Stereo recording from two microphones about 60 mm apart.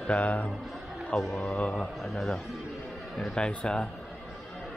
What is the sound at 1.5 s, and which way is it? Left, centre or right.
Speech, centre.